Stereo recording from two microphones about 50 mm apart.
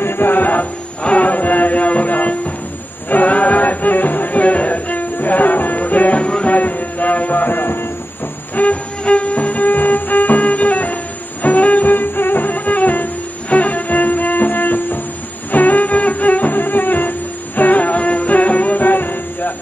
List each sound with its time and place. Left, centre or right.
0.0 s music: left
8.5 s music: left